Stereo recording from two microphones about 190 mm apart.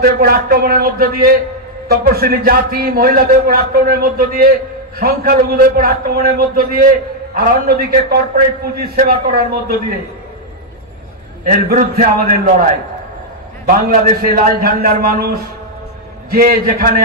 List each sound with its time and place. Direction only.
0.0 s speech: 55° right (ahead or behind)
11.4 s speech: 50° right (ahead or behind)
13.7 s speech: 50° right (ahead or behind)